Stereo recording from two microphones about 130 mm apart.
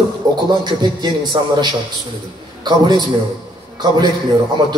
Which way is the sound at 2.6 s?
35° right (ahead or behind).